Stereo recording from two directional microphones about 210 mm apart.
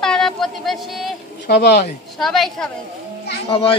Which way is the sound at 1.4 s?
50° left (ahead or behind).